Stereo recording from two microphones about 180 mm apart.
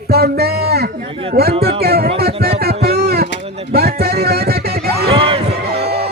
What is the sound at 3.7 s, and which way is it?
Music, 60° right (ahead or behind).